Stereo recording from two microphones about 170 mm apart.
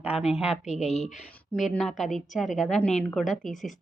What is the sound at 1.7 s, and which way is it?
Speech, centre (ahead or behind).